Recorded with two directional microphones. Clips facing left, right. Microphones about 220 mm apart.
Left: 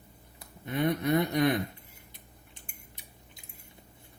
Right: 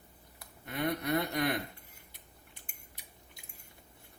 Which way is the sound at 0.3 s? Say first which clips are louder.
Left 6 dB; 20° left (ahead or behind).